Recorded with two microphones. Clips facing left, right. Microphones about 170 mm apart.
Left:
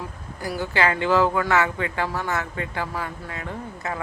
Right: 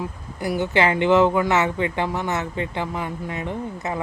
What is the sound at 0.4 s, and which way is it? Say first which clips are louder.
Speech: right 3 dB; 20° right (ahead or behind).